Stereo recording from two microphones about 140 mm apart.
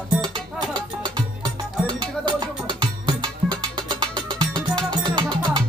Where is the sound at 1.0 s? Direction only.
35° right (ahead or behind).